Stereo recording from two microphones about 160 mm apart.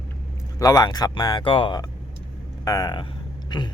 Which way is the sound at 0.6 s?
25° left (ahead or behind).